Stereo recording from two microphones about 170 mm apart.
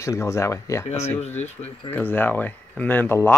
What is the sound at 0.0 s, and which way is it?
Speech, 15° left (ahead or behind).